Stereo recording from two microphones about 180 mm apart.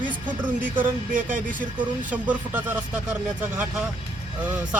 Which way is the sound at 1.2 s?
50° right (ahead or behind).